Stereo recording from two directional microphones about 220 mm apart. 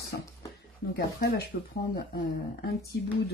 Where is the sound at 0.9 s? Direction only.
45° left (ahead or behind).